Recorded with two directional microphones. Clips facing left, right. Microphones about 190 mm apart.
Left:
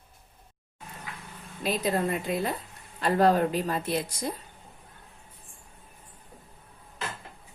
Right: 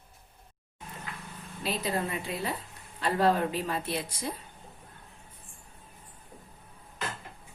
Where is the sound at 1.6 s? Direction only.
45° left (ahead or behind).